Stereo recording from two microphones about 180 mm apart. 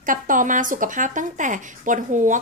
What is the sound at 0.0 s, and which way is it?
Speech, 50° right (ahead or behind).